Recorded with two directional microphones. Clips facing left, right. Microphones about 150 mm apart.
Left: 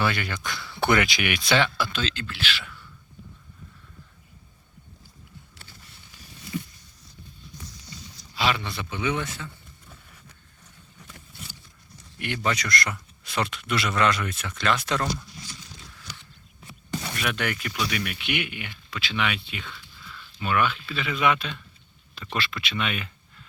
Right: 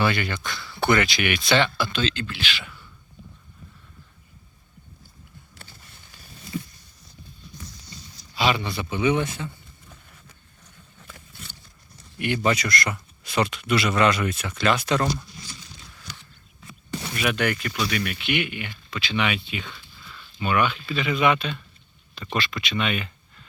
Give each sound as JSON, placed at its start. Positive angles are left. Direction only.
{"t": 0.0, "sound": "a man's voice", "side_deg": 0}
{"t": 5.5, "sound": "a sound", "side_deg": -50}
{"t": 8.4, "sound": "speech", "side_deg": 0}
{"t": 12.2, "sound": "a man's voice", "side_deg": -10}
{"t": 17.2, "sound": "a man's voice", "side_deg": -5}